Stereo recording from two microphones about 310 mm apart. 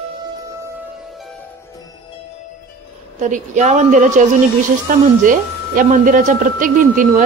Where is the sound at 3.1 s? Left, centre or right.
Right.